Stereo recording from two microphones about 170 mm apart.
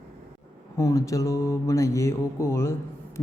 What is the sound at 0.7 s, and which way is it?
Speech, 20° left (ahead or behind).